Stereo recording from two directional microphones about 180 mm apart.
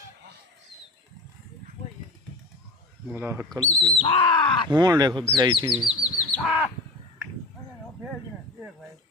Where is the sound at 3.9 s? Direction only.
30° left (ahead or behind).